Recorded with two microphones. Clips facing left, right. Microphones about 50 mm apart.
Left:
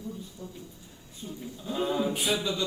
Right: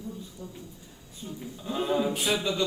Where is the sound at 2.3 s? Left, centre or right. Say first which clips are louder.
Right 2 dB; right.